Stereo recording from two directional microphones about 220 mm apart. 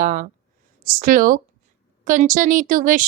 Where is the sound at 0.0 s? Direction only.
40° right (ahead or behind).